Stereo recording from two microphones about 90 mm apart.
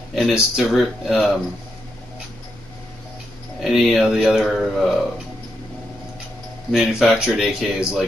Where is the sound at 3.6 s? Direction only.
Centre (ahead or behind).